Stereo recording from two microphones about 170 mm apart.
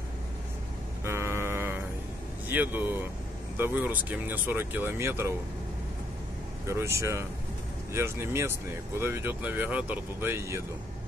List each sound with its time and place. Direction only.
1.0 s a sound: 15° right (ahead or behind)
2.4 s speech: 10° right (ahead or behind)
6.7 s speech: 15° right (ahead or behind)